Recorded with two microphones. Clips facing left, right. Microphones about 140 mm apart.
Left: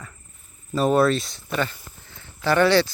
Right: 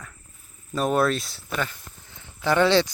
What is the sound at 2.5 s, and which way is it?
Speech, 20° right (ahead or behind).